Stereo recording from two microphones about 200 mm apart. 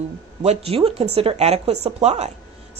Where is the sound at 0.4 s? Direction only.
30° right (ahead or behind).